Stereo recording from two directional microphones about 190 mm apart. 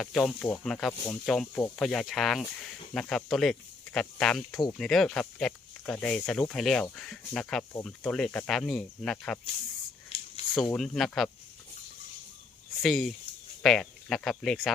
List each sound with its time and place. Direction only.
0.0 s speech: 5° left (ahead or behind)
10.1 s a sound: 30° left (ahead or behind)
10.8 s speech: centre (ahead or behind)
12.8 s speech: centre (ahead or behind)